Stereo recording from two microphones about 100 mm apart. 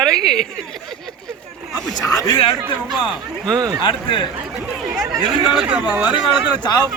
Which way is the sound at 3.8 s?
55° left (ahead or behind).